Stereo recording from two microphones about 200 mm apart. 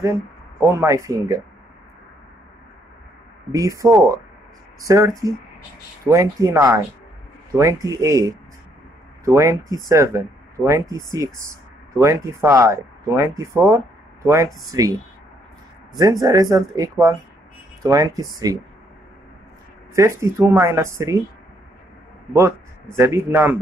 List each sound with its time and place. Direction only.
0.0 s speech: 15° right (ahead or behind)
3.5 s speech: 15° right (ahead or behind)
20.0 s speech: 15° right (ahead or behind)
22.3 s a man's voice: 15° right (ahead or behind)